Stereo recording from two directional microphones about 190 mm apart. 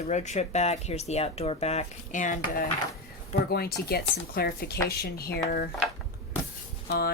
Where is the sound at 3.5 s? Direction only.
55° left (ahead or behind).